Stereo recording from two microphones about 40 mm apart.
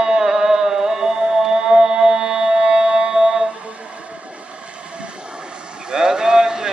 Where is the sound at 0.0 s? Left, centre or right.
Centre.